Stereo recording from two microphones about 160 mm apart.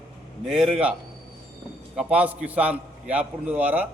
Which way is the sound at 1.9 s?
5° right (ahead or behind).